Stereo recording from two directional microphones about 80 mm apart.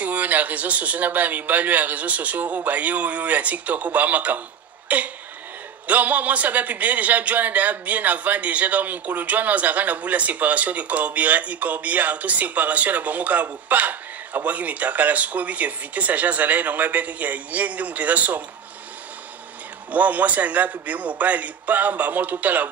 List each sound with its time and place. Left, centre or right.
0.0 s speech: centre
19.9 s speech: centre